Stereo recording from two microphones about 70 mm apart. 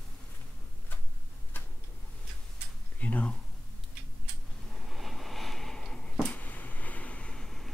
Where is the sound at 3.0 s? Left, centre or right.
Centre.